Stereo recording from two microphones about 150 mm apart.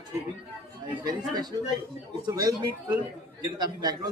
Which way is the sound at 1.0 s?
25° right (ahead or behind).